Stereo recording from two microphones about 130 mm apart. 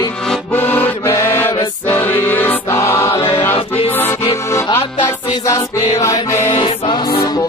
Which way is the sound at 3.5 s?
45° left (ahead or behind).